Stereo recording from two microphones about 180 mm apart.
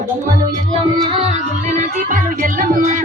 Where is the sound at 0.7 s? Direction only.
30° right (ahead or behind); by 3.0 s 45° right (ahead or behind).